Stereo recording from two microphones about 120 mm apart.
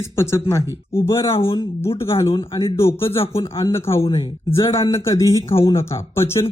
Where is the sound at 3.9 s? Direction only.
50° left (ahead or behind).